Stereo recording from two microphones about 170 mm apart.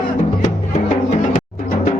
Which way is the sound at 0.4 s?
45° left (ahead or behind).